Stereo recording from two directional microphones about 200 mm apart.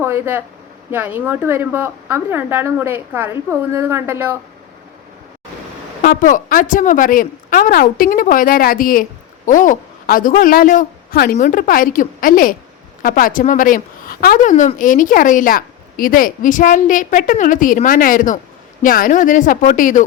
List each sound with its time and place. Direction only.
0.0 s a woman's voice: 10° right (ahead or behind)
6.0 s a woman's voice: 45° left (ahead or behind)